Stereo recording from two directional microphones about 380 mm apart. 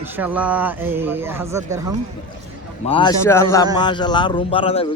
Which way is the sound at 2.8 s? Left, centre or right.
Centre.